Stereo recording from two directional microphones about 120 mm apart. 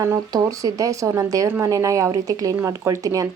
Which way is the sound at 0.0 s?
30° right (ahead or behind).